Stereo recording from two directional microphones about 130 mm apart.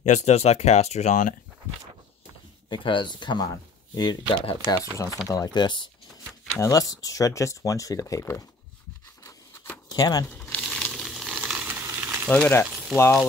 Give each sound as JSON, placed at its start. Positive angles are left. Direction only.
{"t": 0.0, "sound": "speech", "side_deg": 60}
{"t": 2.7, "sound": "speech", "side_deg": 40}
{"t": 9.8, "sound": "speech", "side_deg": 30}
{"t": 10.3, "sound": "crumpling", "side_deg": 10}
{"t": 10.6, "sound": "frying", "side_deg": 0}
{"t": 12.3, "sound": "speech", "side_deg": 15}
{"t": 12.6, "sound": "frying", "side_deg": -5}
{"t": 12.9, "sound": "speech", "side_deg": 20}